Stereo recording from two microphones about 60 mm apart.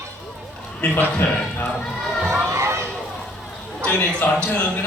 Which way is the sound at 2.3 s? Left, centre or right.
Right.